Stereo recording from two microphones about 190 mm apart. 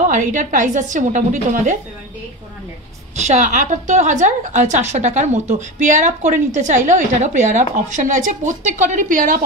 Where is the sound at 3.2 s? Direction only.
40° right (ahead or behind).